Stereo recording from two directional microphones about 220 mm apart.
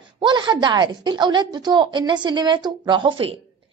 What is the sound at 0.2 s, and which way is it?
A woman's voice, 20° right (ahead or behind).